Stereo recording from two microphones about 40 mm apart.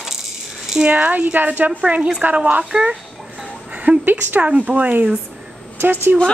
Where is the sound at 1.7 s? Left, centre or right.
Right.